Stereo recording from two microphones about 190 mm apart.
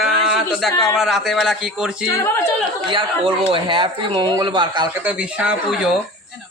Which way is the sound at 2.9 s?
25° right (ahead or behind).